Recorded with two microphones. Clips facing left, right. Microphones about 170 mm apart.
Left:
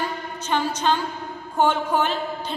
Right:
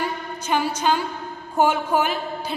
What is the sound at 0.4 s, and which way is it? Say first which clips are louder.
A woman's voice: right 1 dB; 10° right (ahead or behind).